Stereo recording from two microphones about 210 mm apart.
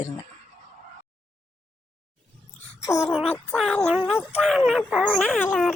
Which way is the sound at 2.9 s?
15° left (ahead or behind).